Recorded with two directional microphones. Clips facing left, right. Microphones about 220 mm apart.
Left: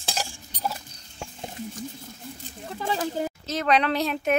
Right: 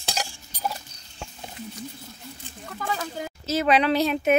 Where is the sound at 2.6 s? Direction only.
25° left (ahead or behind).